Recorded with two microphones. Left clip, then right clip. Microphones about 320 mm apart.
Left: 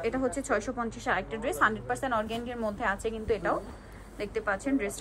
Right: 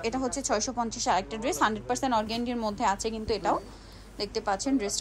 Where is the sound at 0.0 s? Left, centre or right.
Centre.